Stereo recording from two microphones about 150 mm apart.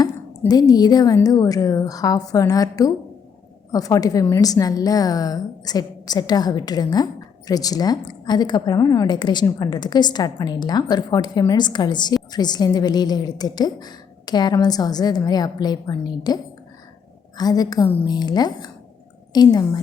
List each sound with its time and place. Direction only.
0.0 s a woman's voice: 25° left (ahead or behind)